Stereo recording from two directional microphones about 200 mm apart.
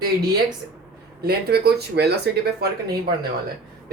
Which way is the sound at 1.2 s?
55° right (ahead or behind).